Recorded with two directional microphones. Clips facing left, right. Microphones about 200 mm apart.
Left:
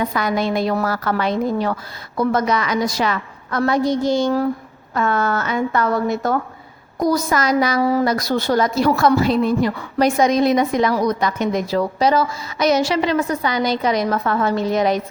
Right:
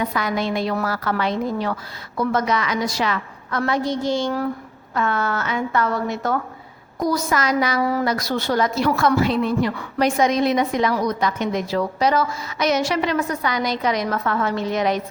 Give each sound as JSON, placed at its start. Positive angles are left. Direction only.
{"t": 0.1, "sound": "a woman's voice", "side_deg": 40}